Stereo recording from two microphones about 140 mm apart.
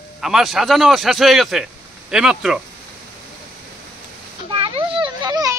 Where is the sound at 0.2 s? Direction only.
Centre (ahead or behind).